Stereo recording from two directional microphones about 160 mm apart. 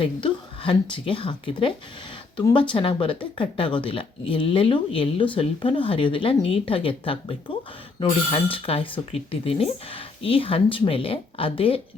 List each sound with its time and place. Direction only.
0.0 s a woman's voice: 30° left (ahead or behind)